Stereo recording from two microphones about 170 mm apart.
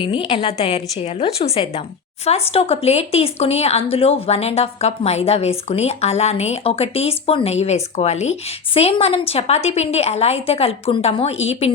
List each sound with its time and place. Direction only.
0.0 s a woman's voice: 30° left (ahead or behind)